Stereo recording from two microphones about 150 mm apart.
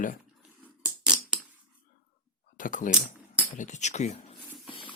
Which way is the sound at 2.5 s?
60° left (ahead or behind).